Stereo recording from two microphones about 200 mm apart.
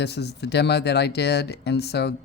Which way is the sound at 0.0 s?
55° left (ahead or behind).